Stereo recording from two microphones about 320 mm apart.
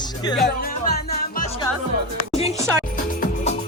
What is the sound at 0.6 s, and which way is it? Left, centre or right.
Music, left.